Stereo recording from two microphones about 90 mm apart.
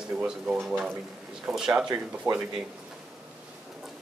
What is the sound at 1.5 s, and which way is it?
Speech, 5° right (ahead or behind).